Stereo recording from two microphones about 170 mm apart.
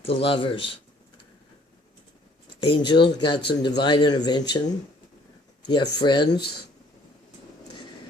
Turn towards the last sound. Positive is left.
turn(degrees=25)  # may be behind; listen again after turning